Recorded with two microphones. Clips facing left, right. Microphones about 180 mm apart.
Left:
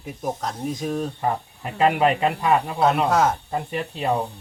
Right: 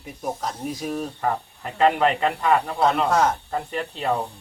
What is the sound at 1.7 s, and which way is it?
Speech, 5° left (ahead or behind).